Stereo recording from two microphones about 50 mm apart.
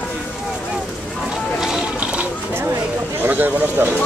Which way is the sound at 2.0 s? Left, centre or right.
Right.